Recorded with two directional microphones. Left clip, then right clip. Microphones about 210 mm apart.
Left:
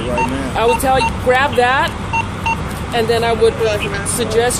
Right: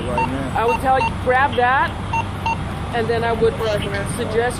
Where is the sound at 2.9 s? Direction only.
20° left (ahead or behind).